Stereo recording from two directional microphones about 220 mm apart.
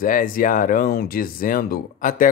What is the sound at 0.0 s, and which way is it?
Speech, 40° left (ahead or behind).